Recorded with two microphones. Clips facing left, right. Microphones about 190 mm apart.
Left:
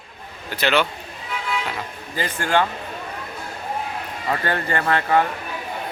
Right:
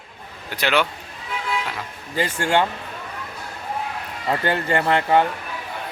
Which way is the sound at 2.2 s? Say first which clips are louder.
Right 1 dB; 25° right (ahead or behind).